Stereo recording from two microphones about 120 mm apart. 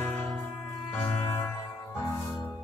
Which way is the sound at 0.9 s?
15° left (ahead or behind).